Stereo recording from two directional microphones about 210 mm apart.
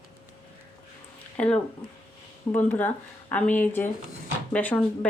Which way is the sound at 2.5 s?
10° left (ahead or behind).